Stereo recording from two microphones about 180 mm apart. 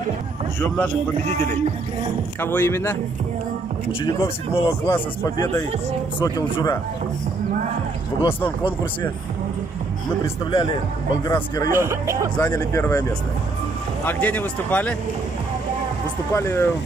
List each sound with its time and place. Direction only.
0.6 s a man's voice: 10° left (ahead or behind)
2.4 s a man's voice: 10° left (ahead or behind)
4.0 s a man's voice: 25° left (ahead or behind)
10.5 s speech: 25° left (ahead or behind)
11.7 s speech: 15° right (ahead or behind)
12.4 s a man's voice: 20° left (ahead or behind)
16.3 s a man's voice: 15° left (ahead or behind)